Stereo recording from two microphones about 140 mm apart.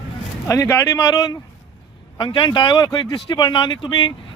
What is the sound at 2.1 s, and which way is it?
Speech, 35° left (ahead or behind).